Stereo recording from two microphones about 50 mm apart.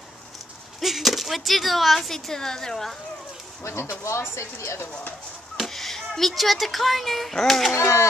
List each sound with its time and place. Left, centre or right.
0.7 s speech: centre
3.6 s speech: left
5.6 s speech: centre